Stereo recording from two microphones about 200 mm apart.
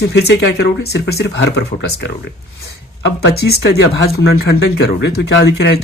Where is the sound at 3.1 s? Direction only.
55° left (ahead or behind).